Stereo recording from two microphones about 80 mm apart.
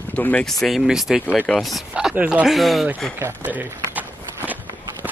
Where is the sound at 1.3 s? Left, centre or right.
Left.